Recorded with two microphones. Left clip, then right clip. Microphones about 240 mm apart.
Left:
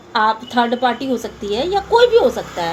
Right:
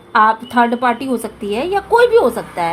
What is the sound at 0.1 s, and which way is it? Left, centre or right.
A woman's voice, right.